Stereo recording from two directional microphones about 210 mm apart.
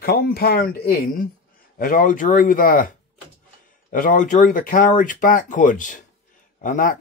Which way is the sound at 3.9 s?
40° left (ahead or behind).